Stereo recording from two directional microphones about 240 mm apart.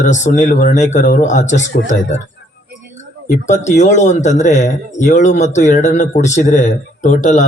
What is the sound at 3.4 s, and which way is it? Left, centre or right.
A man's voice, left.